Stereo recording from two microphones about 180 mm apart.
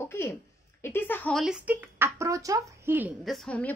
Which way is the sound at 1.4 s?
5° right (ahead or behind).